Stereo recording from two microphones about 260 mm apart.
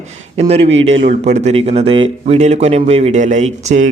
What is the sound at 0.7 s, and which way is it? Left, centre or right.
Speech, right.